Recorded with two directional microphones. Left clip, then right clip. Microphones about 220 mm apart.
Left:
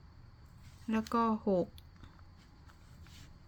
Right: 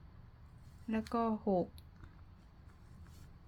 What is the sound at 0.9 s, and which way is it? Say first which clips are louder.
Speech: left 4 dB; 10° left (ahead or behind).